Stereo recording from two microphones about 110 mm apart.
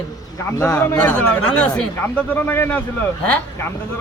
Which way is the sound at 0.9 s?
15° left (ahead or behind).